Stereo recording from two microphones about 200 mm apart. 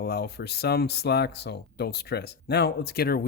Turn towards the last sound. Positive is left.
turn(degrees=50)  # may be behind; listen again after turning